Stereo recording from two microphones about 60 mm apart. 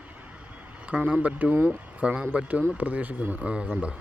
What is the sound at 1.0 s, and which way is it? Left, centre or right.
Speech, right.